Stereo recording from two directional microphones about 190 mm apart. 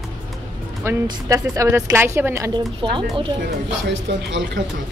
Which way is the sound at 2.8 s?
25° right (ahead or behind).